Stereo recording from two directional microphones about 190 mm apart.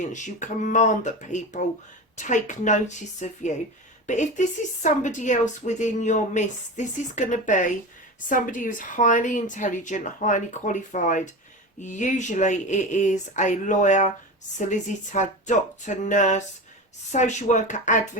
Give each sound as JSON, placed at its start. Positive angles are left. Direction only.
{"t": 0.1, "sound": "a woman's voice", "side_deg": 40}